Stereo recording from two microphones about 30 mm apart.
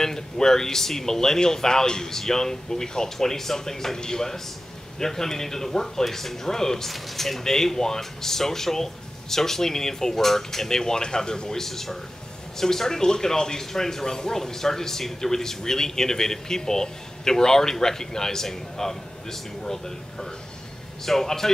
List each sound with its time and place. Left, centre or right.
0.0 s speech: centre
6.9 s speech: centre; by 11.5 s left
11.5 s speech: centre